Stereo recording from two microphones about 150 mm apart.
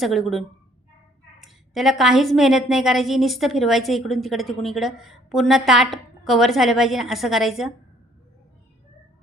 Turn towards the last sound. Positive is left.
turn(degrees=0)  # may be behind; listen again after turning